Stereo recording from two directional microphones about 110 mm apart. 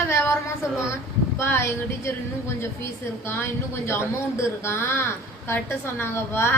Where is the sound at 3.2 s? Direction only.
20° left (ahead or behind).